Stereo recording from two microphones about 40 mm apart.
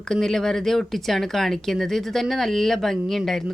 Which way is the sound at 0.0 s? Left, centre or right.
Centre.